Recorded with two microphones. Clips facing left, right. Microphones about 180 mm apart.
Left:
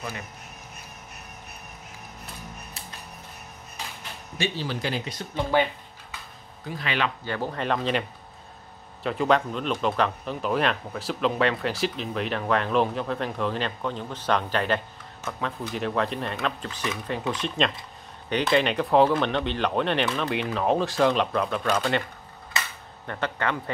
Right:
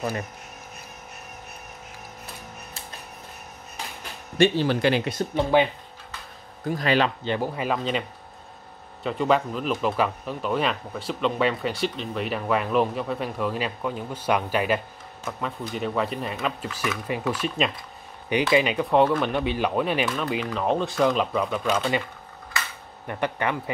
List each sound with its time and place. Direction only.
4.4 s speech: 60° right (ahead or behind)
5.3 s speech: 15° right (ahead or behind)
6.6 s speech: 40° right (ahead or behind)
7.2 s speech: 15° right (ahead or behind)
9.0 s speech: centre (ahead or behind)
23.0 s speech: 15° right (ahead or behind)